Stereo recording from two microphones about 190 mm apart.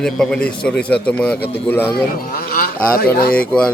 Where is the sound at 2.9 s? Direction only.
50° left (ahead or behind).